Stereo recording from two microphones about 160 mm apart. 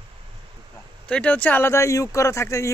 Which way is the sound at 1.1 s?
10° left (ahead or behind).